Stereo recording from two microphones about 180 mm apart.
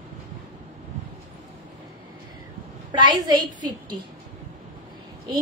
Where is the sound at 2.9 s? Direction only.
25° right (ahead or behind).